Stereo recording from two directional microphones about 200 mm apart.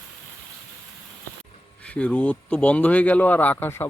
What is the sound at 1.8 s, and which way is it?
Speech, 5° left (ahead or behind).